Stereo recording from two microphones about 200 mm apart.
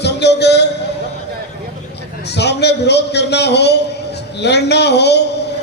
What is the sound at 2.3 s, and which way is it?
A man's voice, 55° left (ahead or behind).